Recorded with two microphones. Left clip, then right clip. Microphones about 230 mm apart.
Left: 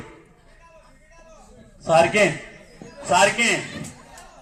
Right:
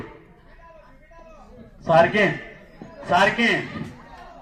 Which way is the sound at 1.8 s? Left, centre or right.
Left.